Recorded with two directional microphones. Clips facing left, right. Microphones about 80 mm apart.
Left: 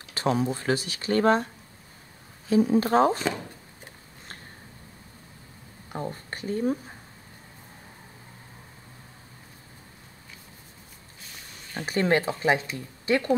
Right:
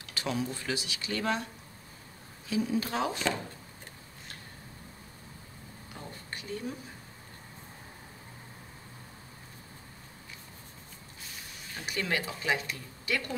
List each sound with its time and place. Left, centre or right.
0.1 s speech: left
2.5 s speech: left
5.9 s speech: left
11.7 s speech: left